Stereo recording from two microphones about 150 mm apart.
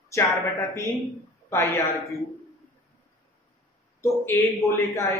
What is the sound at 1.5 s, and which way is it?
Speech, 15° left (ahead or behind).